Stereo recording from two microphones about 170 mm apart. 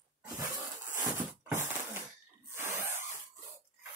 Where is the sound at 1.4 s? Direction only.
15° right (ahead or behind).